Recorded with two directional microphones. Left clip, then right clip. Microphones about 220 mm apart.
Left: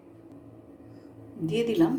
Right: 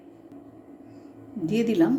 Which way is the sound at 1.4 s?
20° right (ahead or behind).